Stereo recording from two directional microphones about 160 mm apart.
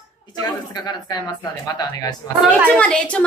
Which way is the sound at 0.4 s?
25° left (ahead or behind).